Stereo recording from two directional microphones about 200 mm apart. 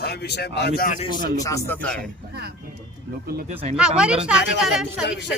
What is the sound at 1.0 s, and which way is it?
Speech, 20° left (ahead or behind).